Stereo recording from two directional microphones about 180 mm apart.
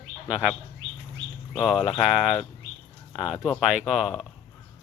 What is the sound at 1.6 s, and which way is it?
Speech, centre (ahead or behind).